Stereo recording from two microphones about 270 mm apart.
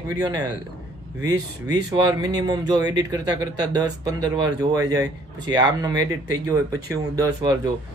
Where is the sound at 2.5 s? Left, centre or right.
Centre.